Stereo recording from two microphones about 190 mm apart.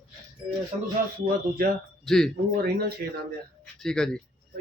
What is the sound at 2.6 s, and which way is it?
Speech, 60° right (ahead or behind).